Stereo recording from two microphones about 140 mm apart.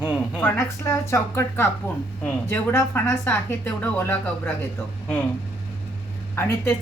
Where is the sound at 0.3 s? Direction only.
15° left (ahead or behind).